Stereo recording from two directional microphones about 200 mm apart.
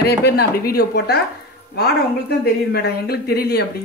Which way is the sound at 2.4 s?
50° left (ahead or behind).